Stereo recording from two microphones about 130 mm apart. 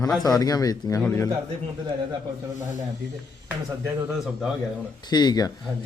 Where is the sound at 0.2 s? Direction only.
30° left (ahead or behind).